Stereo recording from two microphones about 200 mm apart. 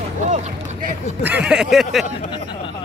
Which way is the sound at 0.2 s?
35° right (ahead or behind).